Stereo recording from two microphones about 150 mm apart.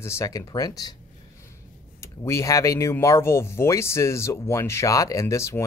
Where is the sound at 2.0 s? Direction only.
20° left (ahead or behind).